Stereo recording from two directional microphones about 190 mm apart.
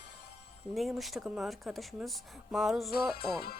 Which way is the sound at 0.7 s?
Centre (ahead or behind).